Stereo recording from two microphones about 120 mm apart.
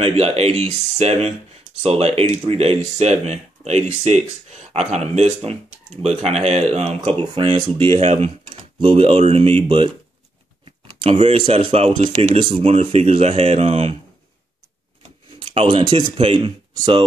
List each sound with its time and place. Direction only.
0.0 s speech: 55° right (ahead or behind)
7.1 s speech: 50° right (ahead or behind)
8.0 s speech: 65° right (ahead or behind)
12.5 s speech: 60° right (ahead or behind)
15.8 s speech: 40° right (ahead or behind)